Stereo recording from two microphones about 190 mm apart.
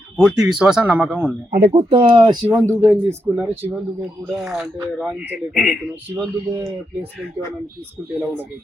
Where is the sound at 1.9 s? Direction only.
25° right (ahead or behind); by 5.6 s centre (ahead or behind).